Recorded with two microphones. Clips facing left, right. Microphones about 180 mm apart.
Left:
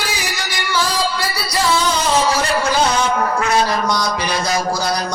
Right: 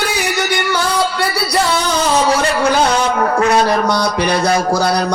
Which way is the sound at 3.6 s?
60° right (ahead or behind).